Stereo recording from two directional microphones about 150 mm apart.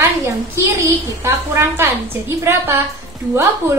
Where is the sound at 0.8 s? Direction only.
20° right (ahead or behind).